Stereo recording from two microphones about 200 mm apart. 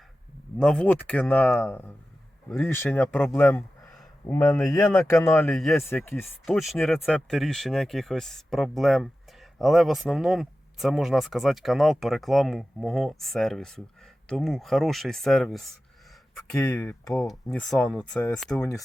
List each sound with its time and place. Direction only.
0.6 s speech: 5° left (ahead or behind)
17.2 s speech: 5° left (ahead or behind)
18.5 s speech: 15° left (ahead or behind)